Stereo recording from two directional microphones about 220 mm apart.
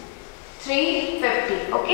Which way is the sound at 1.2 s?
15° left (ahead or behind).